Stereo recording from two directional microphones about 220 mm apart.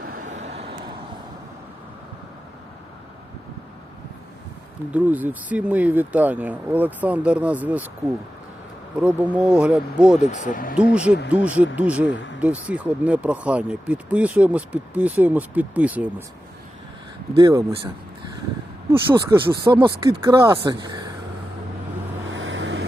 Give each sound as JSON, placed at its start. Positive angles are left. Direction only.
{"t": 0.1, "sound": "vehicle", "side_deg": -35}
{"t": 4.9, "sound": "speech", "side_deg": -5}
{"t": 9.0, "sound": "speech", "side_deg": -5}
{"t": 10.2, "sound": "speech", "side_deg": 35}
{"t": 10.9, "sound": "speech", "side_deg": -5}
{"t": 17.3, "sound": "speech", "side_deg": -15}
{"t": 18.9, "sound": "speech", "side_deg": -10}
{"t": 22.3, "sound": "vehicle", "side_deg": -60}